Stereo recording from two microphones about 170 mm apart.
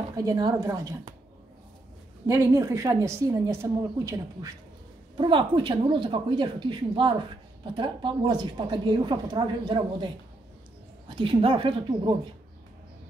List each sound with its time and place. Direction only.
0.1 s a woman's voice: 20° right (ahead or behind)
2.2 s a woman's voice: 15° right (ahead or behind)
11.1 s speech: 30° right (ahead or behind)